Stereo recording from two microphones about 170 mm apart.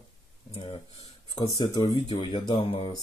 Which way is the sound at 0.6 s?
35° left (ahead or behind).